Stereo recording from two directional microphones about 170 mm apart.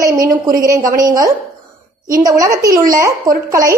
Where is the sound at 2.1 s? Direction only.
20° right (ahead or behind).